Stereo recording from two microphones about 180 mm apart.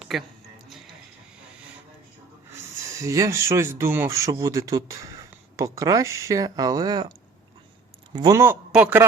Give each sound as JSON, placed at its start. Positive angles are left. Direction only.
{"t": 0.0, "sound": "a sound", "side_deg": 0}
{"t": 3.0, "sound": "speech", "side_deg": -15}
{"t": 8.1, "sound": "speech", "side_deg": -20}